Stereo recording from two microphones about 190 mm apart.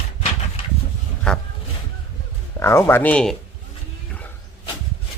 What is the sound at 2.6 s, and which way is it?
Speech, 15° left (ahead or behind).